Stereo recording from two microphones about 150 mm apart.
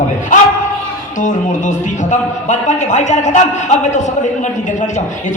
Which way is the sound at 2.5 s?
50° left (ahead or behind).